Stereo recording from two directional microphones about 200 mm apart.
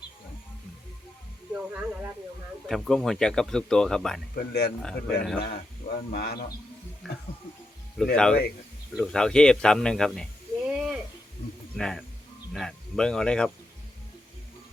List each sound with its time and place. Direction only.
1.5 s speech: 10° right (ahead or behind)
4.4 s speech: 55° left (ahead or behind)
4.8 s speech: 5° left (ahead or behind)
5.4 s speech: 45° left (ahead or behind)
7.1 s speech: centre (ahead or behind)
10.8 s a sound: 5° right (ahead or behind)
11.8 s speech: centre (ahead or behind)